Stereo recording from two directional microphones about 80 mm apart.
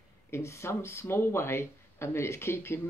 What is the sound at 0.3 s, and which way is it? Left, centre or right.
Speech, left.